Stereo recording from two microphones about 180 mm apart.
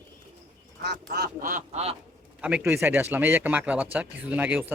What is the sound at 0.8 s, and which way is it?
Duck, 65° right (ahead or behind).